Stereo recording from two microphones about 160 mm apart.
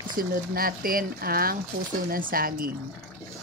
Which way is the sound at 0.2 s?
65° right (ahead or behind).